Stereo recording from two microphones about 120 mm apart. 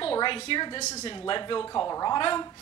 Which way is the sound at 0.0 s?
45° left (ahead or behind).